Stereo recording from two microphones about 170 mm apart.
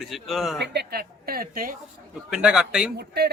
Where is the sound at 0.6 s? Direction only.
70° right (ahead or behind).